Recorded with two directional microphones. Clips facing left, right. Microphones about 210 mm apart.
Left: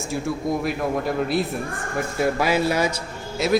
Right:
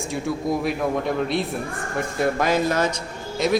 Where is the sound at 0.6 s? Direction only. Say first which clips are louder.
Right 1 dB; centre (ahead or behind).